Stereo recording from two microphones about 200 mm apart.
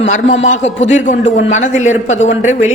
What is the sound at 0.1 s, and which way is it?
A man's voice, 35° left (ahead or behind).